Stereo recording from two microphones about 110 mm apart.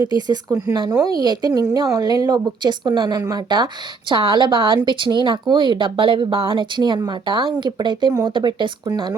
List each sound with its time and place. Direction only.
0.2 s a woman's voice: 35° right (ahead or behind)
4.1 s speech: 50° right (ahead or behind)